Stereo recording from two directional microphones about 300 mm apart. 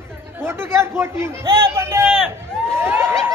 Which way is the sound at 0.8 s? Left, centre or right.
Centre.